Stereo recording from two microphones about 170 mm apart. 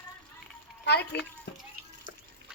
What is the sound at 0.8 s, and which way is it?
Speech, 75° left (ahead or behind).